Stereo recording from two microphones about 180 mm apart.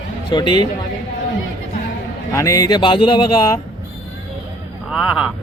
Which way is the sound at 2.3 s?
20° left (ahead or behind).